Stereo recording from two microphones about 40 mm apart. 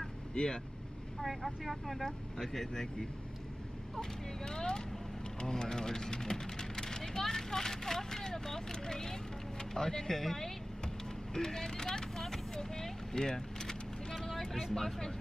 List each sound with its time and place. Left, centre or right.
0.3 s speech: left
1.2 s speech: centre
2.0 s speech: centre
14.2 s vehicle: centre
14.7 s speech: centre